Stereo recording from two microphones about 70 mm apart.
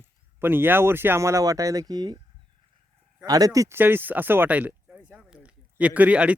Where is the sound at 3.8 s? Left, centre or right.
Right.